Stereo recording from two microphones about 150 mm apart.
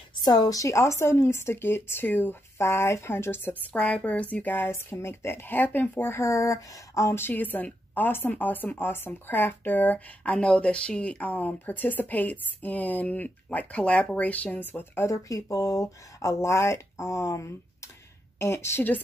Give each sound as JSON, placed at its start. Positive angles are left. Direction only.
{"t": 0.2, "sound": "a woman's voice", "side_deg": 25}